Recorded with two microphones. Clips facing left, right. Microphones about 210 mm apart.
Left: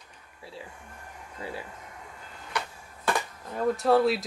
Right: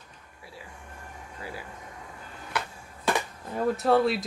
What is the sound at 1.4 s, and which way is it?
Speech, 25° left (ahead or behind).